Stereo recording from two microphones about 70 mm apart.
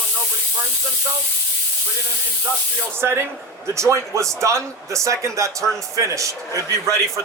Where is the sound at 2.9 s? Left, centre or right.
Right.